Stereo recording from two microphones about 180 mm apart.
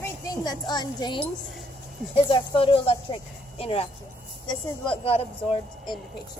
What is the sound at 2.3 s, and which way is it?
Speech, 30° left (ahead or behind).